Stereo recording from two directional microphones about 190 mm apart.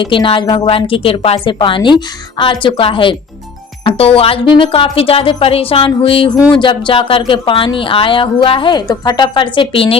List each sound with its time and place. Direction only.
0.0 s speech: 25° left (ahead or behind)